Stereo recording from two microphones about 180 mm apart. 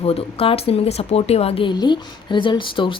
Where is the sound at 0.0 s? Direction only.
30° left (ahead or behind).